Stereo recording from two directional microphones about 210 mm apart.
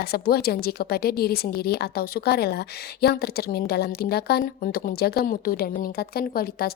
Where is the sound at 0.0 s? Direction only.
45° left (ahead or behind).